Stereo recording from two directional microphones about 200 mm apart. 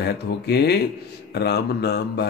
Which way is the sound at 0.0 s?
55° left (ahead or behind).